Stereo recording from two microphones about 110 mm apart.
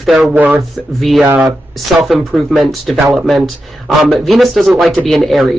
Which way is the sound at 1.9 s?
Centre (ahead or behind).